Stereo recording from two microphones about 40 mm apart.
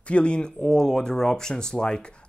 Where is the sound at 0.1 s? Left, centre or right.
Left.